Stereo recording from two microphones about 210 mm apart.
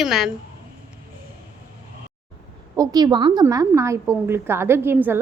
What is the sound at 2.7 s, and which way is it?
Speech, 15° right (ahead or behind).